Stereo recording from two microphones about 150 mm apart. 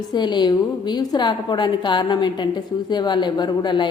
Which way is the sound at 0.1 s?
30° left (ahead or behind).